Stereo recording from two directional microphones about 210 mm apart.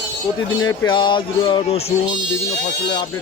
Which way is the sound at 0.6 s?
20° left (ahead or behind).